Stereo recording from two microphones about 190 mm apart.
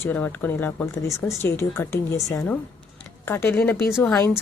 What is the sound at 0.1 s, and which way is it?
Speech, 10° left (ahead or behind).